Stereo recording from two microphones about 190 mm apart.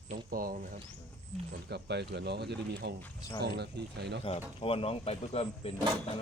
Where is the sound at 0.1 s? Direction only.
50° right (ahead or behind).